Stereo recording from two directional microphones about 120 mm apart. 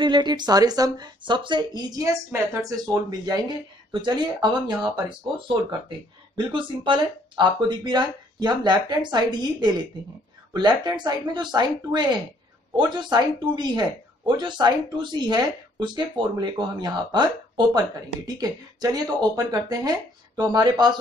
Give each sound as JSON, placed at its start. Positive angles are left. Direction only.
{"t": 0.0, "sound": "speech", "side_deg": -40}